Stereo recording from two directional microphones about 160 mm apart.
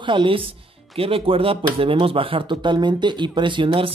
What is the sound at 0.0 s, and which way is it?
Speech, 30° right (ahead or behind).